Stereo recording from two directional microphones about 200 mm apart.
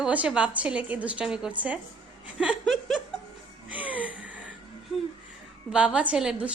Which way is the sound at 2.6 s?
Centre (ahead or behind).